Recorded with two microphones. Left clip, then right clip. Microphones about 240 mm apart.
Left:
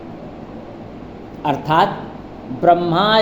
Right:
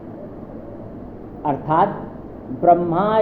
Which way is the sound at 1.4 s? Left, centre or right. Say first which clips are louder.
Left 2 dB; left.